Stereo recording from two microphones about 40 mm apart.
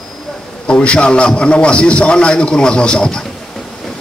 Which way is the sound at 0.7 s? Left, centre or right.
Left.